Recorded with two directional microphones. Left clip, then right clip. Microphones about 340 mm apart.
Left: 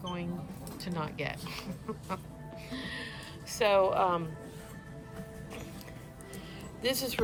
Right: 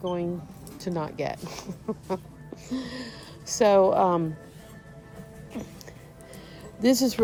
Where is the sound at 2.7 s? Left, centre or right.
Centre.